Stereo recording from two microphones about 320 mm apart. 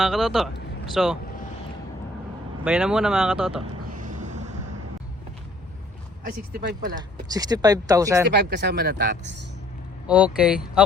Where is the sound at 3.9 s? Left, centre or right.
Right.